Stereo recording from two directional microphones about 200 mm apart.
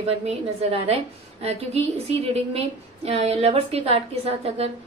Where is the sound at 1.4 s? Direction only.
30° right (ahead or behind).